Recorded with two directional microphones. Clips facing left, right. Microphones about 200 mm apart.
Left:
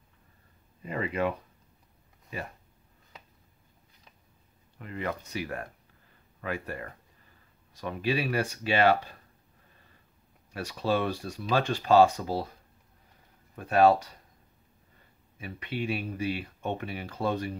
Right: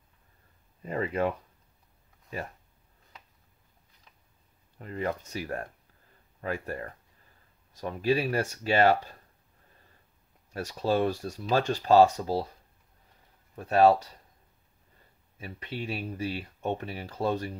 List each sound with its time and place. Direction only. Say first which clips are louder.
0.8 s speech: right 1 dB; 40° right (ahead or behind)
4.7 s speech: right 2 dB; 35° right (ahead or behind)
10.5 s speech: right 1 dB; 45° right (ahead or behind)
13.6 s speech: right 1 dB; 35° right (ahead or behind)
15.4 s speech: left 3 dB; 35° right (ahead or behind)